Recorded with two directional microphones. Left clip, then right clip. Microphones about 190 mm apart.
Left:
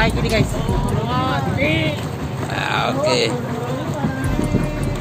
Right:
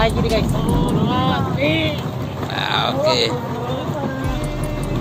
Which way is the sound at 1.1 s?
15° left (ahead or behind).